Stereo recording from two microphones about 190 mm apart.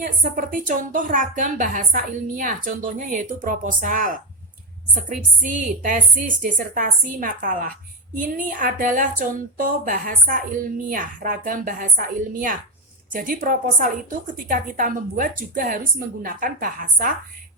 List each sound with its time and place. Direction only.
0.0 s a woman's voice: 45° right (ahead or behind)